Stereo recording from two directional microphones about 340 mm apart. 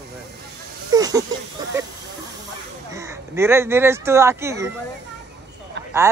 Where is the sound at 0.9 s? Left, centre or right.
Centre.